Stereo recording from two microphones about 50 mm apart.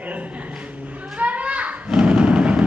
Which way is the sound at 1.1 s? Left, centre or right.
Right.